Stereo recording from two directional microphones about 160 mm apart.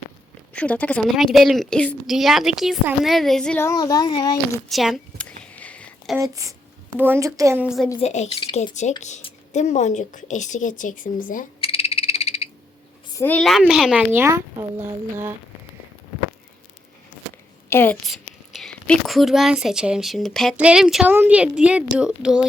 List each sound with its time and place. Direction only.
0.5 s speech: 10° left (ahead or behind)
3.6 s speech: 20° left (ahead or behind)
4.7 s a sound: centre (ahead or behind)
6.1 s a woman's voice: 20° right (ahead or behind)
7.9 s a woman's voice: 45° left (ahead or behind)
11.6 s frog: 35° left (ahead or behind)
13.1 s speech: 10° left (ahead or behind); by 14.9 s 20° right (ahead or behind)
17.7 s a woman's voice: 15° left (ahead or behind)
18.0 s speech: centre (ahead or behind)